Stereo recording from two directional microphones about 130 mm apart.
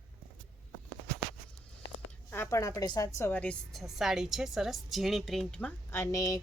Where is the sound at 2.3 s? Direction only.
20° left (ahead or behind).